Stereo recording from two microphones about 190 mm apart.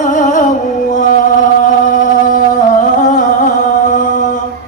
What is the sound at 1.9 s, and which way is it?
Music, 45° left (ahead or behind).